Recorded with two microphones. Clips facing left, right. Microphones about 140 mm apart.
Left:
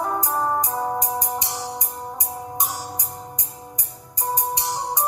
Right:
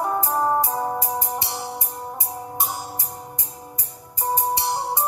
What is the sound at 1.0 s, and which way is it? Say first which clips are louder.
Music: left 1 dB; 15° left (ahead or behind).